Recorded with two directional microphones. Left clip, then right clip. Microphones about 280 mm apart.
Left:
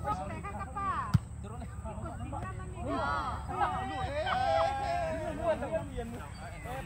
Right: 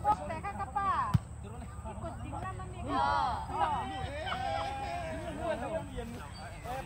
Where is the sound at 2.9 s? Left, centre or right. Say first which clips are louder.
Right 3 dB; right.